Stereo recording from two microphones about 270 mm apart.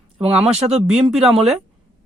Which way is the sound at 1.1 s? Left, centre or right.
Centre.